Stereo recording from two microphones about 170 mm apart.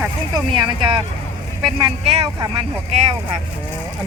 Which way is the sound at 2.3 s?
25° right (ahead or behind).